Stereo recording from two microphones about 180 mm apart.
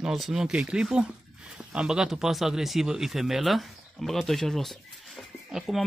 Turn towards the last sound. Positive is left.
turn(degrees=0)  # may be behind; listen again after turning